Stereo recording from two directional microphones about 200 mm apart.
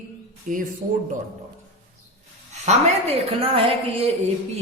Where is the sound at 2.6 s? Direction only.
30° right (ahead or behind).